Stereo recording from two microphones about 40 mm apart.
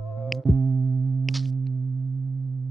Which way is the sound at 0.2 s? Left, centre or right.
Centre.